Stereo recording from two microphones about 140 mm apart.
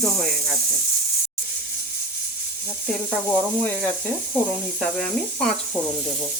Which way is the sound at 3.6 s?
15° left (ahead or behind).